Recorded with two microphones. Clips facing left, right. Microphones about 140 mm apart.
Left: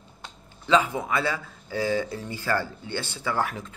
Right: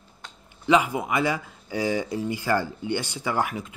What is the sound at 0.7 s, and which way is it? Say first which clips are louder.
A man's voice: right 1 dB; 10° right (ahead or behind).